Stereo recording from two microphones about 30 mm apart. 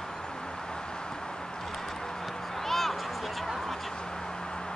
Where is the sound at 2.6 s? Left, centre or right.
Centre.